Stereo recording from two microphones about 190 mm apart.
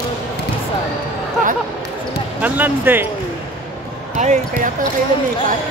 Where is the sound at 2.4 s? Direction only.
10° right (ahead or behind).